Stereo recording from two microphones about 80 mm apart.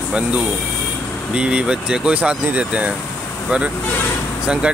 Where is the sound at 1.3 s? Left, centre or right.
Centre.